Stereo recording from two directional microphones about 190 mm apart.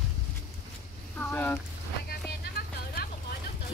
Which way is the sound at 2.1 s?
55° left (ahead or behind).